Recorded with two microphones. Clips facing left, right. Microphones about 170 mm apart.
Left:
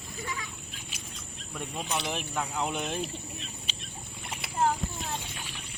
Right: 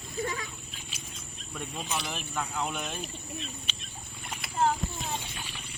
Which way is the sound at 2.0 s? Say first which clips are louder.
Left 2 dB; 20° left (ahead or behind).